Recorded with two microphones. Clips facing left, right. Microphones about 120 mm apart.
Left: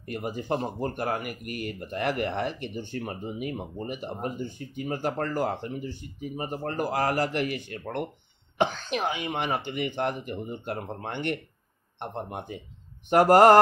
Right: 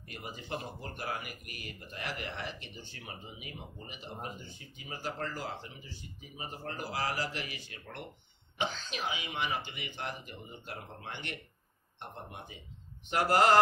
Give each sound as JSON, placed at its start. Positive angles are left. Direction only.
{"t": 0.0, "sound": "speech", "side_deg": 50}